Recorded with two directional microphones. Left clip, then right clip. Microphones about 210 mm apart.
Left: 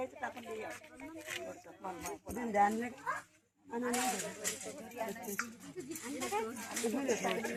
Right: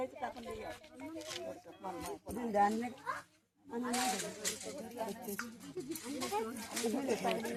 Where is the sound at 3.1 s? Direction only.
50° right (ahead or behind).